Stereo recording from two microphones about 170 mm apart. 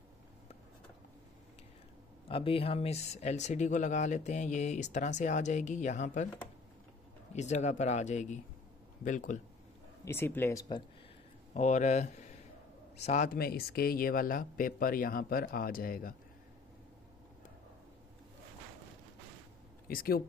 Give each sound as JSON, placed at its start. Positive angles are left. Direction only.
{"t": 2.2, "sound": "speech", "side_deg": 35}
{"t": 7.3, "sound": "speech", "side_deg": 45}
{"t": 10.0, "sound": "speech", "side_deg": 15}
{"t": 11.5, "sound": "speech", "side_deg": 45}
{"t": 13.4, "sound": "speech", "side_deg": 65}
{"t": 19.9, "sound": "speech", "side_deg": 60}